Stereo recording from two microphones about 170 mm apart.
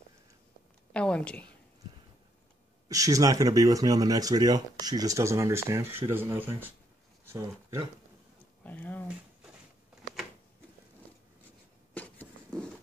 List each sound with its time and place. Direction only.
0.9 s a woman's voice: 5° left (ahead or behind)
2.9 s speech: 20° right (ahead or behind)
8.6 s a woman's voice: 10° left (ahead or behind)
11.9 s a sound: 10° left (ahead or behind)